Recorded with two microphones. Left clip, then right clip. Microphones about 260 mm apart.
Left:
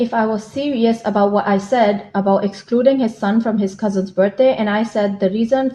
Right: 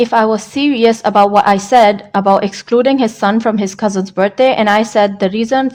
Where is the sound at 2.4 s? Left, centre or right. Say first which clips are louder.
Right 5 dB; right.